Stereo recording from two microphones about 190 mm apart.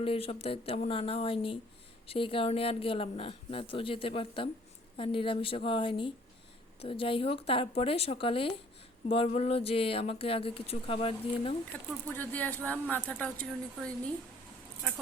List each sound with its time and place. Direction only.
0.0 s speech: 30° left (ahead or behind)
12.0 s a woman's voice: 10° left (ahead or behind)